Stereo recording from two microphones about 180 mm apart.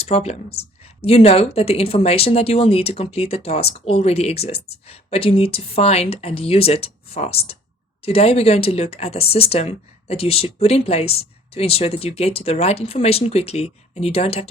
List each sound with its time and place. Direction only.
0.0 s speech: 35° left (ahead or behind)